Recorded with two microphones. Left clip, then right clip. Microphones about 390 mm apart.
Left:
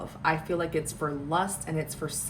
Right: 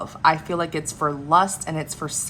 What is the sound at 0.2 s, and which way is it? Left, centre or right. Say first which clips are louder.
A woman's voice: right 8 dB; centre.